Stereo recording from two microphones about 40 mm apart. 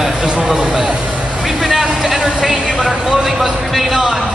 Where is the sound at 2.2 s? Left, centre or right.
Centre.